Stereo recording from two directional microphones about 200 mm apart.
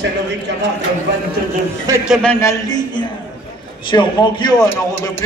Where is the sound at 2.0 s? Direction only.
Centre (ahead or behind); by 4.7 s 20° left (ahead or behind).